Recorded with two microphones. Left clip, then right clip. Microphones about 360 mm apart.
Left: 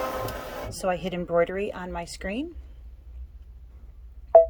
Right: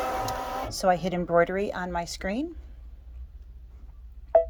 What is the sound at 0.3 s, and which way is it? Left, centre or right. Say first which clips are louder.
Speech: right 4 dB; centre.